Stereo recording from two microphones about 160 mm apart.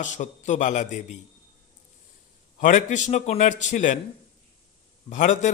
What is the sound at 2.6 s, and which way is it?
A man's voice, 50° left (ahead or behind).